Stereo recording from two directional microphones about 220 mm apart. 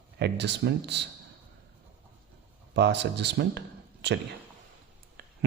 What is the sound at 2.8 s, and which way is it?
Speech, 50° right (ahead or behind).